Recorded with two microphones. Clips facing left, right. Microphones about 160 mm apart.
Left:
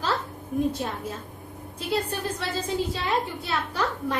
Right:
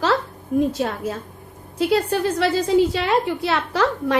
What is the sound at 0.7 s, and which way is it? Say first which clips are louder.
A woman's voice: right 7 dB; 90° right.